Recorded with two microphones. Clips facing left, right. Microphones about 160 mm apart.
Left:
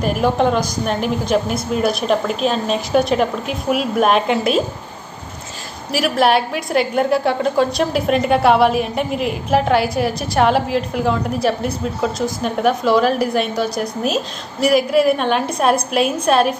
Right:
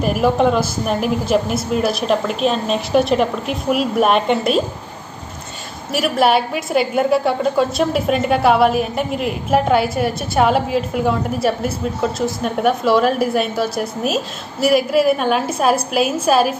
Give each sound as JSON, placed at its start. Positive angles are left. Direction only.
{"t": 0.0, "sound": "a woman's voice", "side_deg": 0}
{"t": 5.9, "sound": "a woman's voice", "side_deg": 0}